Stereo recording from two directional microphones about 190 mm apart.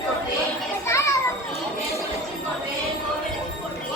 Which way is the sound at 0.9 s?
15° left (ahead or behind).